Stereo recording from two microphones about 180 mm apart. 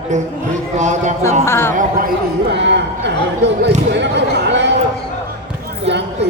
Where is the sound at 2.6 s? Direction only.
75° right (ahead or behind).